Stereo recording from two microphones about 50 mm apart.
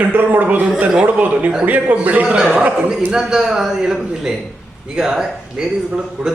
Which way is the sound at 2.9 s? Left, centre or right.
Centre.